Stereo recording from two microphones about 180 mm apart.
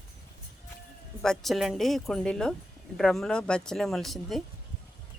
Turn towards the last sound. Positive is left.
turn(degrees=0)  # may be behind; listen again after turning